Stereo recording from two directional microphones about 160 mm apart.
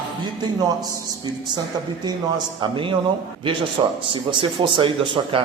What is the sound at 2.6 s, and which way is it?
A man's voice, 30° right (ahead or behind).